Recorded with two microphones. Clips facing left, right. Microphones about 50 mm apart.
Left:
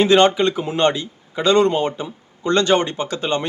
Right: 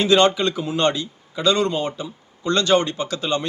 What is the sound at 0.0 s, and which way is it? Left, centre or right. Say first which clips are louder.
A man's voice: left 3 dB; left.